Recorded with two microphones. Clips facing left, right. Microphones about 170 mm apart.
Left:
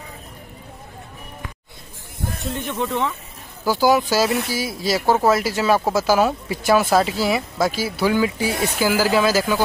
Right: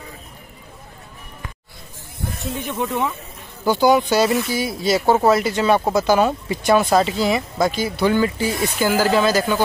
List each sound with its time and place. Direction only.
2.4 s speech: 5° right (ahead or behind)
3.8 s speech: centre (ahead or behind)
8.5 s speech: 65° left (ahead or behind)
8.7 s speech: 10° left (ahead or behind)